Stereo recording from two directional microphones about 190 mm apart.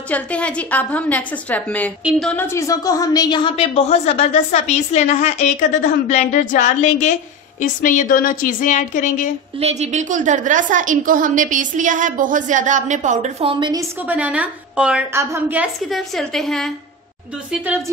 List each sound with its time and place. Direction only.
0.1 s a woman's voice: 5° left (ahead or behind); by 9.3 s 40° left (ahead or behind)
9.6 s a woman's voice: 35° right (ahead or behind)
14.0 s a woman's voice: 5° right (ahead or behind)
15.9 s a woman's voice: centre (ahead or behind)